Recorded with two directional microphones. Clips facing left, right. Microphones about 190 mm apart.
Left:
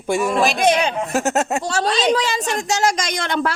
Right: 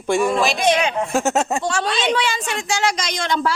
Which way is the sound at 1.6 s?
40° left (ahead or behind).